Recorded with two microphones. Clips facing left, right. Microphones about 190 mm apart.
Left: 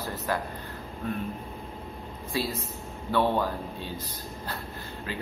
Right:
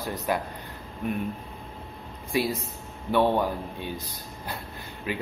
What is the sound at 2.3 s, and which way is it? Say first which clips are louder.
Speech: right 4 dB; 15° right (ahead or behind).